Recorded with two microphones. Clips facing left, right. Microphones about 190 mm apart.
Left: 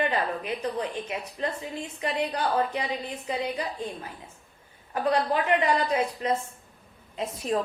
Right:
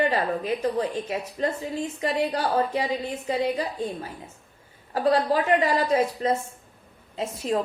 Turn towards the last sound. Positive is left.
turn(degrees=-25)  # may be behind; listen again after turning